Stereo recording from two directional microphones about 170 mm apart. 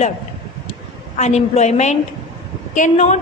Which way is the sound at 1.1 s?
40° left (ahead or behind).